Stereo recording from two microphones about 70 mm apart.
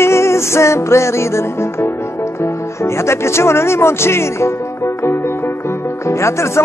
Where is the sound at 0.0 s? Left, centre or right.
Left.